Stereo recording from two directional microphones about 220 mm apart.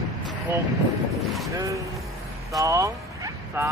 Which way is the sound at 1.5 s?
15° right (ahead or behind).